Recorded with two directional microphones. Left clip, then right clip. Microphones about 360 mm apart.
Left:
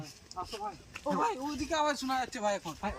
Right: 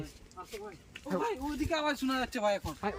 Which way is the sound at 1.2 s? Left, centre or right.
Centre.